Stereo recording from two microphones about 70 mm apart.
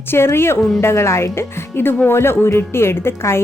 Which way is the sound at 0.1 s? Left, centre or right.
Left.